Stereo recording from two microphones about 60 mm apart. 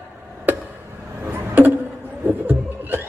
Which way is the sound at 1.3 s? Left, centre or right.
Right.